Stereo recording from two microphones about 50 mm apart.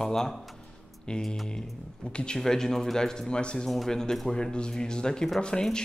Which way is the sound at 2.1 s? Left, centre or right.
Centre.